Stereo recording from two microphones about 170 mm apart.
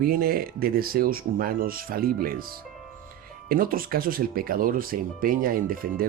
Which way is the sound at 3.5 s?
60° right (ahead or behind).